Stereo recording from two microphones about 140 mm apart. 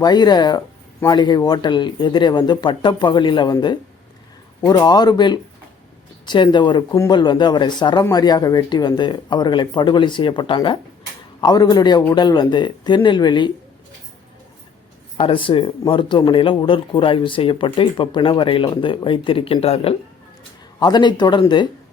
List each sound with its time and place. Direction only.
0.0 s speech: 30° left (ahead or behind)
15.2 s speech: 40° left (ahead or behind)
20.7 s speech: 30° left (ahead or behind)